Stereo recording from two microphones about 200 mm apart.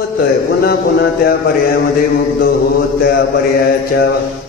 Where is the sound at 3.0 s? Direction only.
50° left (ahead or behind).